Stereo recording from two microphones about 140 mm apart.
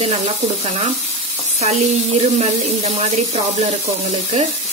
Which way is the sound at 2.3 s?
45° right (ahead or behind).